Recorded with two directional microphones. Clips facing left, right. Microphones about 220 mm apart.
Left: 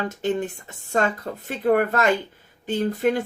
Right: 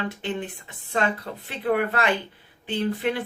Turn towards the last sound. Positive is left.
turn(degrees=45)  # may be behind; listen again after turning